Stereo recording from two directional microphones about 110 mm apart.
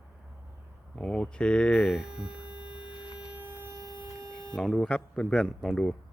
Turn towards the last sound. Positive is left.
turn(degrees=5)  # may be behind; listen again after turning